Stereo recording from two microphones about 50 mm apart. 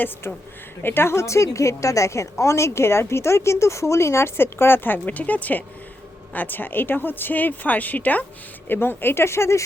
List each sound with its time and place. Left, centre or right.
0.2 s a woman's voice: left
8.6 s speech: left